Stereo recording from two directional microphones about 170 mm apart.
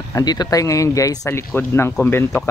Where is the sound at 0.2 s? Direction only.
25° left (ahead or behind).